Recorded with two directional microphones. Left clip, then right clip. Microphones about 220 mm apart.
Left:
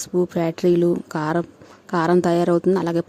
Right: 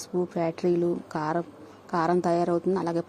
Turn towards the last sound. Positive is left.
turn(degrees=40)  # may be behind; listen again after turning